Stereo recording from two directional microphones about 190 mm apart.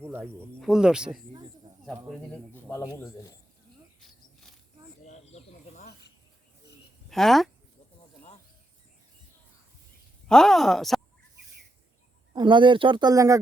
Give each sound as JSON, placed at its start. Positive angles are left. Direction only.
{"t": 0.0, "sound": "speech", "side_deg": -10}
{"t": 2.0, "sound": "a man's voice", "side_deg": 5}
{"t": 5.0, "sound": "snake", "side_deg": 40}
{"t": 7.1, "sound": "speech", "side_deg": 0}
{"t": 10.2, "sound": "speech", "side_deg": 0}
{"t": 12.3, "sound": "speech", "side_deg": -25}